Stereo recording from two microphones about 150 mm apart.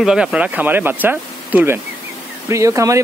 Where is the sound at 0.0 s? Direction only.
5° right (ahead or behind).